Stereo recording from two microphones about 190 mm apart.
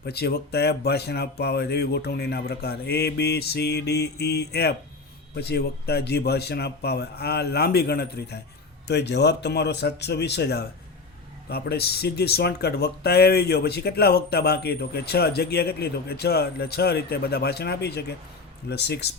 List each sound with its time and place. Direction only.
0.0 s speech: 60° left (ahead or behind)